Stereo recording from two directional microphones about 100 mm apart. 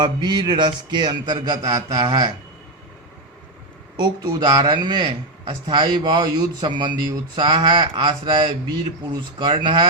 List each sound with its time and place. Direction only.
0.0 s a man's voice: 50° right (ahead or behind)
3.9 s a man's voice: 45° right (ahead or behind)